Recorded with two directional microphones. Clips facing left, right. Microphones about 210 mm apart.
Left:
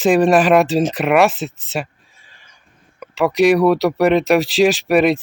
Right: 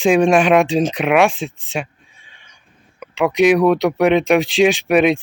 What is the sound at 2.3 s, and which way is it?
Neigh, centre (ahead or behind).